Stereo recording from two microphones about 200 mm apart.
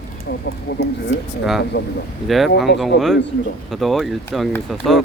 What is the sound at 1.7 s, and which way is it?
Speech, 55° left (ahead or behind).